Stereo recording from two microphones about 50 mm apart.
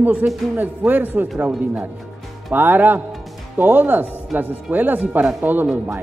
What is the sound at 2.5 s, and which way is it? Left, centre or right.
Speech, right.